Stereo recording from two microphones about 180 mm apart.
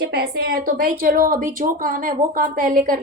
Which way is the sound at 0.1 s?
60° right (ahead or behind).